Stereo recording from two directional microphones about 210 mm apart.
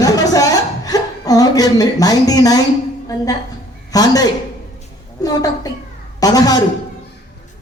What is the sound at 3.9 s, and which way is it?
A man's voice, 15° left (ahead or behind).